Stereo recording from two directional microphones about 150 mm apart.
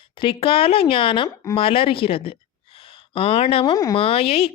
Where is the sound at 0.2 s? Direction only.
35° left (ahead or behind).